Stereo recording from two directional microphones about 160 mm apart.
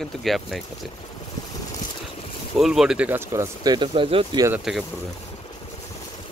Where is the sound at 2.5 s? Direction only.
Centre (ahead or behind); by 4.4 s 35° right (ahead or behind).